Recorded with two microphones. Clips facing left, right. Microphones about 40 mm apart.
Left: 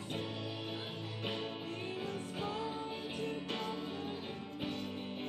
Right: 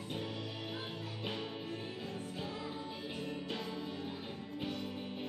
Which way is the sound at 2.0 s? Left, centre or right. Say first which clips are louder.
Left 3 dB; left.